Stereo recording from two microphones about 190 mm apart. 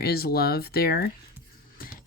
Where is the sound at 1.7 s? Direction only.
50° left (ahead or behind).